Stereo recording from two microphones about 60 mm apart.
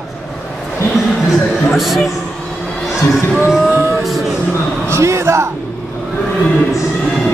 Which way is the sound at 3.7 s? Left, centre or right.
Right.